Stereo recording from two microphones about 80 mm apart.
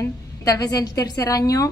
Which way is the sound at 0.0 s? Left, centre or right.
Left.